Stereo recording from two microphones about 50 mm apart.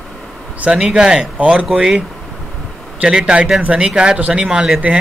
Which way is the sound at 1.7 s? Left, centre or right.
Centre.